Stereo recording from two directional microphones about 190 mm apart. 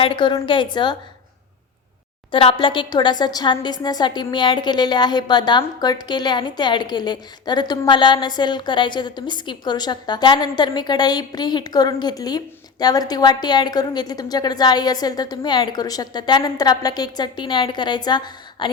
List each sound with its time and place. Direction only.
0.0 s a woman's voice: 25° left (ahead or behind)
2.3 s a woman's voice: 30° left (ahead or behind)